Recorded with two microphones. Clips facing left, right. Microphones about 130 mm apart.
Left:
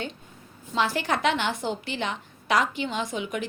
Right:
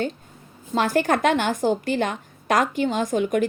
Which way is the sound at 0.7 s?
45° right (ahead or behind).